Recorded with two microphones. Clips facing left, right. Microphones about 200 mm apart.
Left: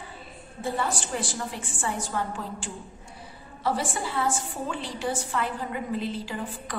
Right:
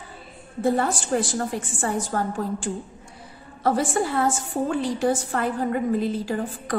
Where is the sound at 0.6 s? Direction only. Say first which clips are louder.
Right 7 dB; 50° right (ahead or behind).